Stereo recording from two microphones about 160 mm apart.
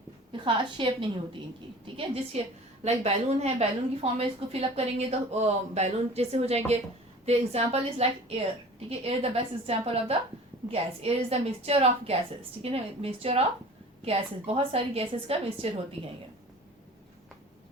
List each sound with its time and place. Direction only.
0.3 s a woman's voice: 30° right (ahead or behind)
2.8 s a woman's voice: 45° right (ahead or behind)